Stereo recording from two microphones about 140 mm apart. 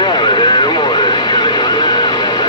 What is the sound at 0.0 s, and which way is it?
Radio, 35° left (ahead or behind).